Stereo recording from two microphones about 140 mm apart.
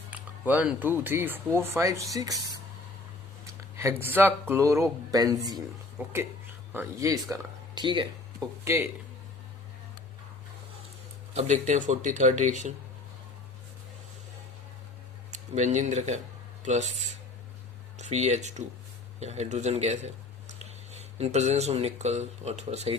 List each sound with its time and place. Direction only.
0.1 s speech: 10° right (ahead or behind)
3.8 s speech: 20° right (ahead or behind)
6.7 s speech: 25° right (ahead or behind)
7.8 s speech: 35° right (ahead or behind)
8.6 s speech: 20° right (ahead or behind)
11.3 s speech: 55° right (ahead or behind)
15.3 s speech: 60° right (ahead or behind)
17.9 s speech: 55° right (ahead or behind)